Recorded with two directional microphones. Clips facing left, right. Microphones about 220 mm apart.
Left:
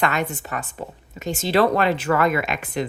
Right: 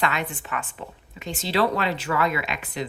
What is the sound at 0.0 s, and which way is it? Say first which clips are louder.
Speech: left 4 dB; 45° left (ahead or behind).